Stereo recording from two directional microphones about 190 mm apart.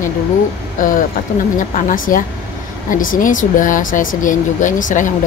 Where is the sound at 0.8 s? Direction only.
45° left (ahead or behind).